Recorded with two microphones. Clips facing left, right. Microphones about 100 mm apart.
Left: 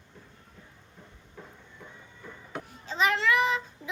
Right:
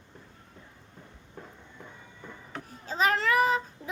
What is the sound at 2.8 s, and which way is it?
Child singing, 40° right (ahead or behind).